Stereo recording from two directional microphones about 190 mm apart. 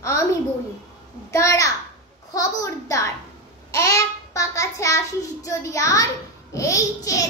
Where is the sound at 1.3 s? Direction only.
15° left (ahead or behind).